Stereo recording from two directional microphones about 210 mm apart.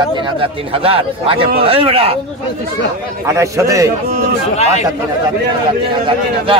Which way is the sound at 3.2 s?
15° right (ahead or behind).